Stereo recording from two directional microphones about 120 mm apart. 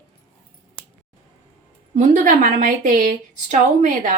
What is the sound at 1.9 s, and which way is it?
Speech, 90° right.